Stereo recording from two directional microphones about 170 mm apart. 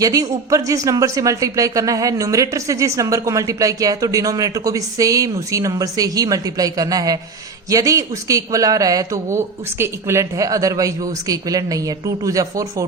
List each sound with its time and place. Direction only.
0.0 s speech: 20° right (ahead or behind)